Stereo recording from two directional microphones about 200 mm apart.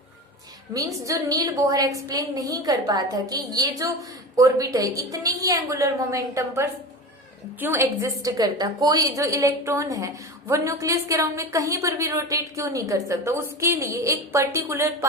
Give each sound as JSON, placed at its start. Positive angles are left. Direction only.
{"t": 0.7, "sound": "a woman's voice", "side_deg": -15}